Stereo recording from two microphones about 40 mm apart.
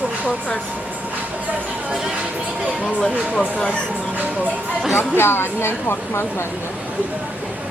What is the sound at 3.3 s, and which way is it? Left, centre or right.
Speech, left.